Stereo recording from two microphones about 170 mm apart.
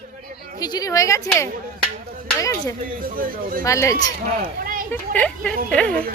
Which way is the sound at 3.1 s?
55° right (ahead or behind).